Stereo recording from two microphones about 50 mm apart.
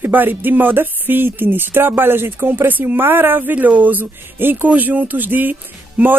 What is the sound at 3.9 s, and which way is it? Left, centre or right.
A woman's voice, right.